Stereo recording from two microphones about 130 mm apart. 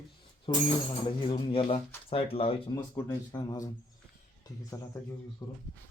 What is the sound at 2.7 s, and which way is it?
Speech, 30° left (ahead or behind).